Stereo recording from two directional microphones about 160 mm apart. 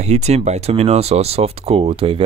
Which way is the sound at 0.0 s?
45° right (ahead or behind).